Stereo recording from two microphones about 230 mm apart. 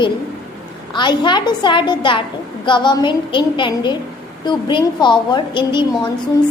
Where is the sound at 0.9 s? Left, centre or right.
Centre.